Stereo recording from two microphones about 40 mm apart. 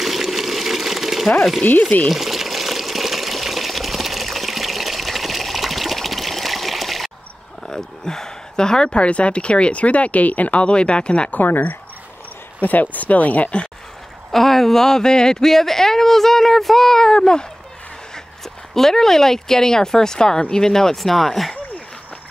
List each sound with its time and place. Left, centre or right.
0.0 s a sound: centre
2.0 s water: centre
7.6 s speech: centre
11.2 s speech: left
14.3 s speech: centre
18.1 s speech: centre